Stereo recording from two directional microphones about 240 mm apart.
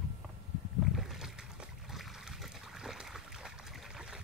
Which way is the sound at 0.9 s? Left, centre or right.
Centre.